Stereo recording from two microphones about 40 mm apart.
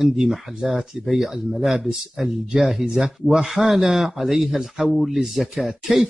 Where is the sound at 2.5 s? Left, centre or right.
Centre.